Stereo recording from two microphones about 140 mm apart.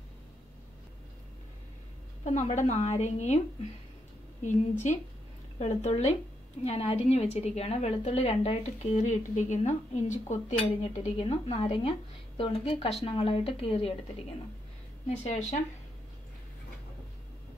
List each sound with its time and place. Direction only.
2.2 s a woman's voice: 55° left (ahead or behind)
5.6 s a woman's voice: 55° left (ahead or behind)
11.1 s a woman's voice: 45° left (ahead or behind)
15.0 s a woman's voice: 55° left (ahead or behind)